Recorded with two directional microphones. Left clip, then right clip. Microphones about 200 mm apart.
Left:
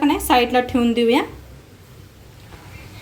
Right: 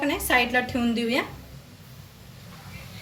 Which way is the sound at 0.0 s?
40° left (ahead or behind).